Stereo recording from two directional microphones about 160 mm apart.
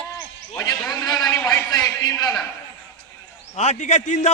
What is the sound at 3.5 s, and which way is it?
Speech, 45° left (ahead or behind).